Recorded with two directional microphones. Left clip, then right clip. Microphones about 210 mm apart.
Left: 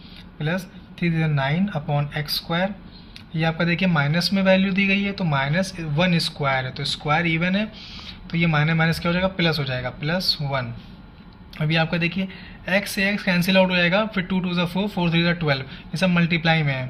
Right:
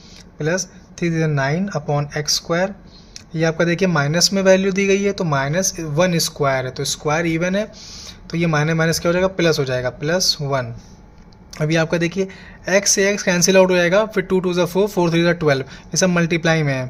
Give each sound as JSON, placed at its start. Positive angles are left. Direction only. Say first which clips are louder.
{"t": 0.3, "sound": "speech", "louder": "right 7 dB", "side_deg": -55}